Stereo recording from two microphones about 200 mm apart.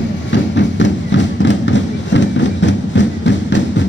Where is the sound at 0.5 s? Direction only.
65° left (ahead or behind).